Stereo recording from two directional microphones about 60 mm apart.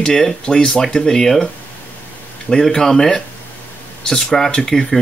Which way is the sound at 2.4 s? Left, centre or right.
Centre.